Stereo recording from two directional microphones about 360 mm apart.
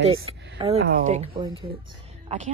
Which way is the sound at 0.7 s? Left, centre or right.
Centre.